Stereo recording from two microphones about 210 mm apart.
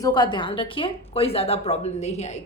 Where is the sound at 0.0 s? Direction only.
20° left (ahead or behind).